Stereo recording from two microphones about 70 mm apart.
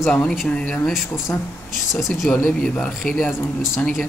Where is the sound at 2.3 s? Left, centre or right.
Centre.